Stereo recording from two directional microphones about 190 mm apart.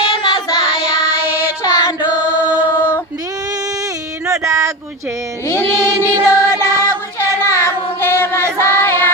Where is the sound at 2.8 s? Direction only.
10° left (ahead or behind).